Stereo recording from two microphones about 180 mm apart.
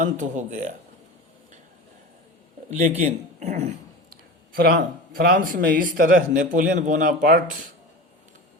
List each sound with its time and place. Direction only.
0.0 s speech: 45° right (ahead or behind)
2.6 s a man's voice: 40° right (ahead or behind)
4.1 s a sound: 55° right (ahead or behind)
5.1 s speech: 50° right (ahead or behind)